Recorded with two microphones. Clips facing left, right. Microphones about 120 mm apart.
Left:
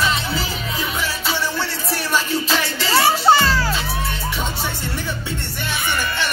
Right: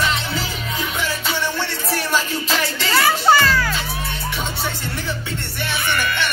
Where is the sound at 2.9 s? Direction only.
25° left (ahead or behind).